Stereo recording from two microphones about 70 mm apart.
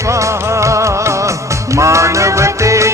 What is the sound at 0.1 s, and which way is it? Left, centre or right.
Music, right.